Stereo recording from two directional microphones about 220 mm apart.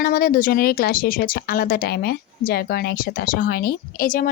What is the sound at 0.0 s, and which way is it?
Speech, 40° left (ahead or behind).